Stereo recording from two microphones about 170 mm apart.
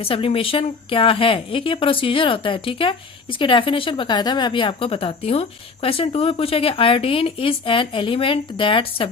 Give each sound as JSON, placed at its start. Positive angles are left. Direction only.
{"t": 0.0, "sound": "a woman's voice", "side_deg": 30}